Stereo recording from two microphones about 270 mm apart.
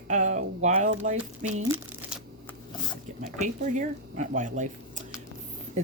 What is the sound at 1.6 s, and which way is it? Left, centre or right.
Crumpling, centre.